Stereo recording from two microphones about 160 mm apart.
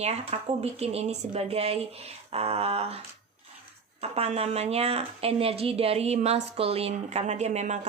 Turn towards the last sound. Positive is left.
turn(degrees=-45)  # may be behind; listen again after turning